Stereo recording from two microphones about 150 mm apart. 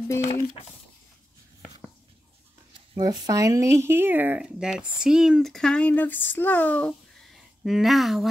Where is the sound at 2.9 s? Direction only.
25° right (ahead or behind).